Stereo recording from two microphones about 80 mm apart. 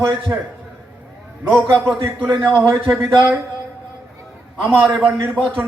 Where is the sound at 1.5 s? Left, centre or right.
Centre.